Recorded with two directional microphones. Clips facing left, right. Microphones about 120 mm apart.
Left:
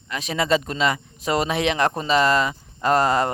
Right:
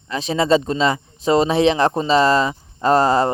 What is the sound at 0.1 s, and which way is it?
Speech, 30° right (ahead or behind).